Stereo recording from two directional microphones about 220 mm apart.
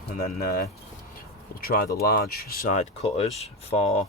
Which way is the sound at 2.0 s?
45° left (ahead or behind).